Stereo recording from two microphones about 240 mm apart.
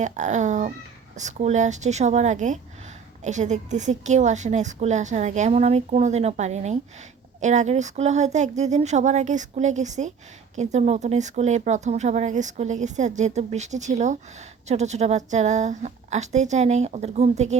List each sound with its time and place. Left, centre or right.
0.0 s speech: right